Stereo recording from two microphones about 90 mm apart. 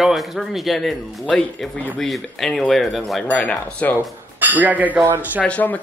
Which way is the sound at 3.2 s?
15° left (ahead or behind).